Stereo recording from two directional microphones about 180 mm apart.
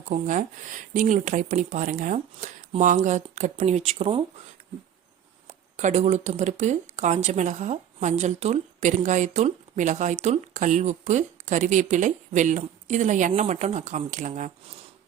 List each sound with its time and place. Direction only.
0.1 s speech: 45° right (ahead or behind)
5.7 s speech: 40° right (ahead or behind)